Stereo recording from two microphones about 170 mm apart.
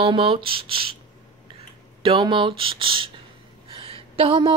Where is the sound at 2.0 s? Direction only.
30° right (ahead or behind).